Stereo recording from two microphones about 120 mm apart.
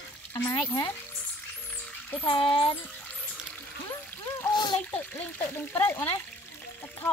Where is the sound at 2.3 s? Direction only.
45° left (ahead or behind).